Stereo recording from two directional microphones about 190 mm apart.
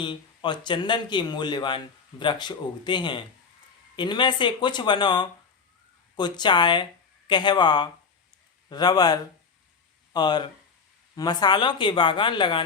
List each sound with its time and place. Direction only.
0.0 s speech: 25° left (ahead or behind)